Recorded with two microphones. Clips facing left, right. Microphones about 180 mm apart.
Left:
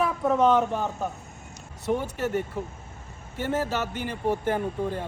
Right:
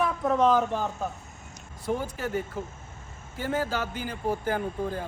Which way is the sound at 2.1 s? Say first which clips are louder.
Left 3 dB; centre (ahead or behind).